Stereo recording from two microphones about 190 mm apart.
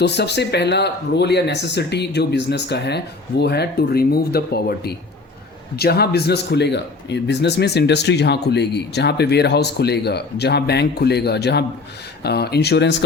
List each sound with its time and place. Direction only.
0.0 s a man's voice: 60° left (ahead or behind)